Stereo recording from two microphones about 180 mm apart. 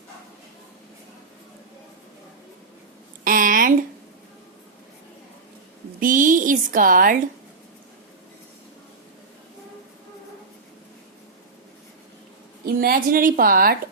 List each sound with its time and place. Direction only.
3.2 s a sound: 50° right (ahead or behind)
6.0 s speech: 50° right (ahead or behind)
12.6 s a woman's voice: 55° right (ahead or behind)